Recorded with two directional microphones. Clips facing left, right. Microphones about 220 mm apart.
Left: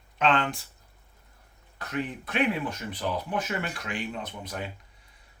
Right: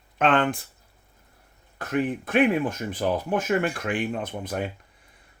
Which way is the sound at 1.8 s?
50° right (ahead or behind).